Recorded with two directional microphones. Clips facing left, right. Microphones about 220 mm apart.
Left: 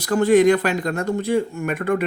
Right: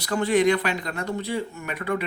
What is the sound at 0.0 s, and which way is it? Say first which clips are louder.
Speech: left 6 dB; 45° left (ahead or behind).